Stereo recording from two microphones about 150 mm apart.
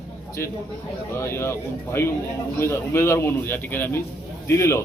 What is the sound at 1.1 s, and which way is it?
A man's voice, 15° left (ahead or behind).